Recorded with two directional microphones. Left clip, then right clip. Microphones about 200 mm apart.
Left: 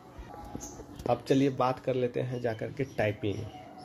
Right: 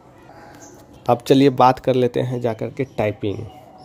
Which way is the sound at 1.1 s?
45° right (ahead or behind).